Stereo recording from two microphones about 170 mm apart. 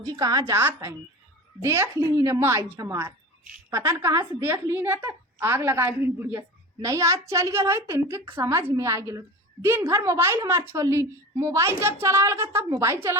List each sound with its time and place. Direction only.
0.0 s a woman's voice: 20° right (ahead or behind)